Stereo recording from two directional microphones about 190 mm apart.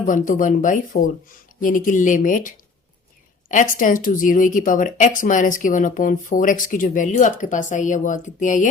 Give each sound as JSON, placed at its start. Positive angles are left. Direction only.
{"t": 0.0, "sound": "speech", "side_deg": 45}
{"t": 3.5, "sound": "speech", "side_deg": 45}